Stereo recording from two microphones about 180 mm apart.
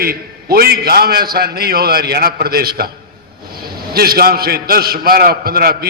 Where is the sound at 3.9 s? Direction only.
60° right (ahead or behind).